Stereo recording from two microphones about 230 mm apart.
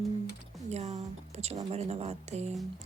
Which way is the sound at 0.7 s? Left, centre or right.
Right.